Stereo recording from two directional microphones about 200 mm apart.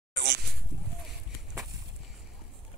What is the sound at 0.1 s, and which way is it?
Goat, 60° right (ahead or behind).